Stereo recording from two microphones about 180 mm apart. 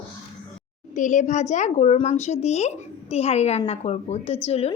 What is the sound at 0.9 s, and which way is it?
A child's voice, 45° left (ahead or behind).